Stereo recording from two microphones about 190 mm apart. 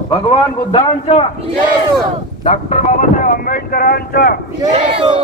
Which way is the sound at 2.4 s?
35° left (ahead or behind).